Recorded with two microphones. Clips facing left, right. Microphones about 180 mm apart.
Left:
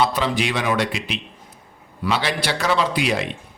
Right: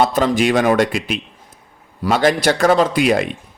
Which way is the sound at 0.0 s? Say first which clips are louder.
Right 5 dB; 45° right (ahead or behind).